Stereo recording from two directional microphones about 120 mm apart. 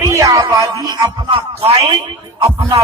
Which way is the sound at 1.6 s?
50° right (ahead or behind).